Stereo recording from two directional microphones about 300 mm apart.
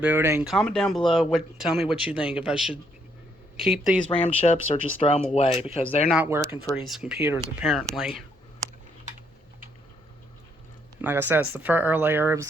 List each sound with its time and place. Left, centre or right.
0.0 s speech: centre
4.1 s speech: centre
6.1 s speech: centre
11.0 s speech: centre